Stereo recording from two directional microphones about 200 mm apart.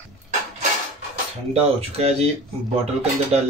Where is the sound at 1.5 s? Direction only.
30° right (ahead or behind).